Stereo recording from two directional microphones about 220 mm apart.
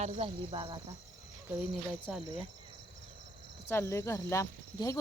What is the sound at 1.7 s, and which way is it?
Speech, centre (ahead or behind).